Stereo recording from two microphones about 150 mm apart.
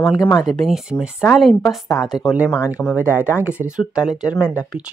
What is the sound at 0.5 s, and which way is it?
Speech, centre (ahead or behind).